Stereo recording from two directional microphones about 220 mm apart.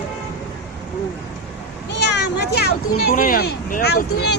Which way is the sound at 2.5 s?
45° left (ahead or behind).